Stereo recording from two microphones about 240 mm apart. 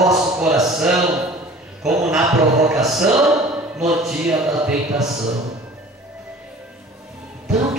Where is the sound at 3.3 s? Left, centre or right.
Centre.